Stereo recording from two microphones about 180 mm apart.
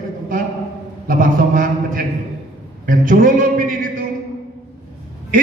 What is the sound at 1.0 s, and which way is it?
A man's voice, 50° right (ahead or behind).